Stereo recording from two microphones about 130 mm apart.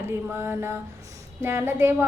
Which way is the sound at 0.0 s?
20° right (ahead or behind).